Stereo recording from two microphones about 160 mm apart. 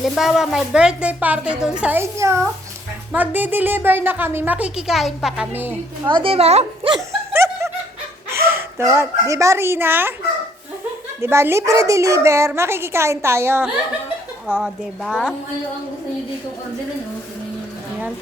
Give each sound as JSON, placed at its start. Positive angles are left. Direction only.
{"t": 0.0, "sound": "a woman's voice", "side_deg": -5}
{"t": 6.1, "sound": "a woman's voice", "side_deg": -35}
{"t": 7.3, "sound": "snicker", "side_deg": -15}
{"t": 8.4, "sound": "speech", "side_deg": -15}
{"t": 11.2, "sound": "a woman's voice", "side_deg": -15}
{"t": 14.4, "sound": "a woman's voice", "side_deg": -5}